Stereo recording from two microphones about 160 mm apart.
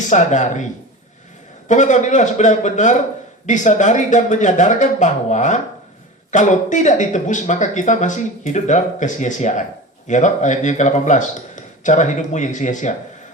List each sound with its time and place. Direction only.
0.1 s speech: 50° left (ahead or behind)
1.6 s speech: 50° left (ahead or behind)